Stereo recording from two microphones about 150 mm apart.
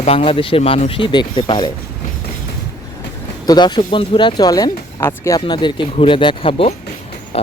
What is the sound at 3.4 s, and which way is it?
Speech, 30° left (ahead or behind).